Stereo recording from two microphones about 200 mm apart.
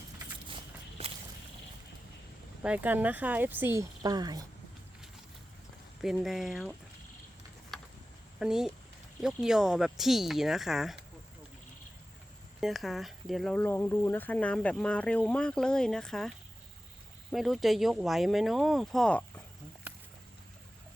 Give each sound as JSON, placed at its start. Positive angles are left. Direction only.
{"t": 1.0, "sound": "walk", "side_deg": -30}
{"t": 2.6, "sound": "speech", "side_deg": -10}
{"t": 6.0, "sound": "speech", "side_deg": 0}
{"t": 7.7, "sound": "a sound", "side_deg": 0}
{"t": 8.4, "sound": "speech", "side_deg": -5}
{"t": 12.5, "sound": "speech", "side_deg": 0}
{"t": 17.3, "sound": "speech", "side_deg": 0}